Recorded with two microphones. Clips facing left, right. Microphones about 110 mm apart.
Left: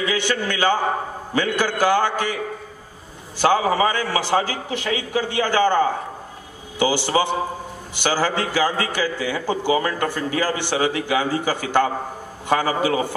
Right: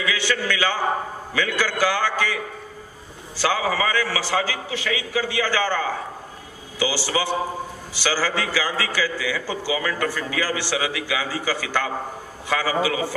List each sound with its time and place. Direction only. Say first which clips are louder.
0.0 s a man's voice: left 2 dB; 45° left (ahead or behind)
3.3 s a man's voice: left 5 dB; 45° left (ahead or behind)
10.0 s a man's voice: left 3 dB; 50° left (ahead or behind)